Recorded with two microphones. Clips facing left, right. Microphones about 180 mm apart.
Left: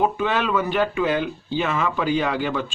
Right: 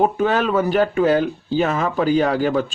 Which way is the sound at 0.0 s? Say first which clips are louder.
Right 4 dB; 40° right (ahead or behind).